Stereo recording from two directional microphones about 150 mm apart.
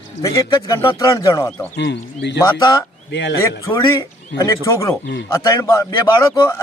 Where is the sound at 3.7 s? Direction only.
10° left (ahead or behind).